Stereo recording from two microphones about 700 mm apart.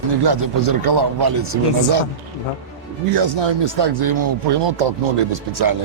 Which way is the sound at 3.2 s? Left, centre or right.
Right.